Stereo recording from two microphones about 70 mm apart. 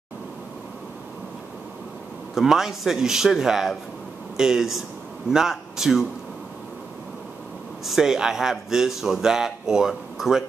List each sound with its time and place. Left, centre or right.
2.3 s a man's voice: centre
7.8 s a man's voice: centre